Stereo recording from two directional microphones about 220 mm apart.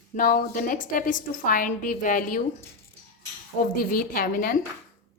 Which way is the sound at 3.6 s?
40° left (ahead or behind).